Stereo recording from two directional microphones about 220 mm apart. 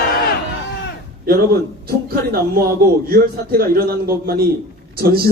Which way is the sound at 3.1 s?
45° right (ahead or behind).